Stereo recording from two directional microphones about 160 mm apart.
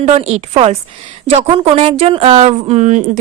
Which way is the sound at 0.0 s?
40° right (ahead or behind).